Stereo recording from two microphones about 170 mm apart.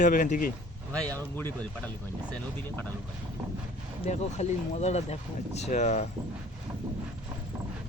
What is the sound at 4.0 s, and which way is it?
Speech, 40° left (ahead or behind).